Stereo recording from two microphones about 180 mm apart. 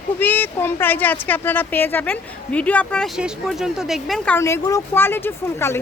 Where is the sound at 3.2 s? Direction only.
5° right (ahead or behind).